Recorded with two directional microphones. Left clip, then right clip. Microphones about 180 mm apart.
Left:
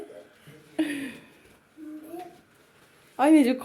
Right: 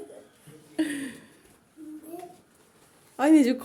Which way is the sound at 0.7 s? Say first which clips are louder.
Even; 20° right (ahead or behind).